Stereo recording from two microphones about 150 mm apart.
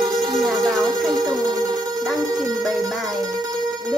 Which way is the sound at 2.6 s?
Centre (ahead or behind).